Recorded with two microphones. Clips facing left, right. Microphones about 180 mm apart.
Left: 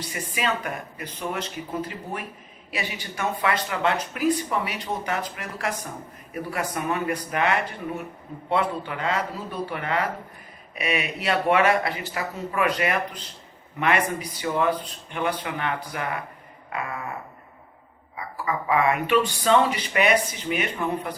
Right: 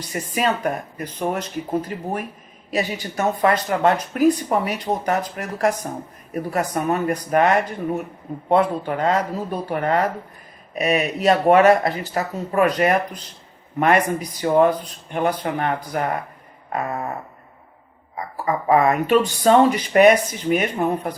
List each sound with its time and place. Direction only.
0.1 s speech: 45° right (ahead or behind)
2.6 s speech: 40° right (ahead or behind)
16.6 s a sound: 40° right (ahead or behind)
18.1 s speech: 40° right (ahead or behind)